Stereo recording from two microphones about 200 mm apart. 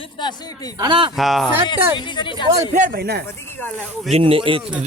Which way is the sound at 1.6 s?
25° left (ahead or behind).